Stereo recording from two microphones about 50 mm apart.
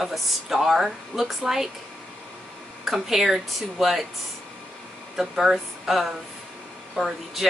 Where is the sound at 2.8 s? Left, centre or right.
Centre.